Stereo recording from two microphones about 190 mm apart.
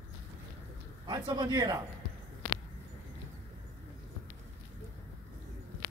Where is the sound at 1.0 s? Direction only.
20° right (ahead or behind).